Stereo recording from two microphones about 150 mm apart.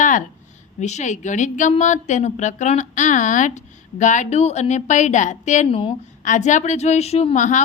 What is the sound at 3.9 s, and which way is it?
A woman's voice, 55° left (ahead or behind).